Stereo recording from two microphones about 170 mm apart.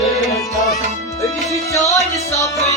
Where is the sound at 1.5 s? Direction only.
20° left (ahead or behind).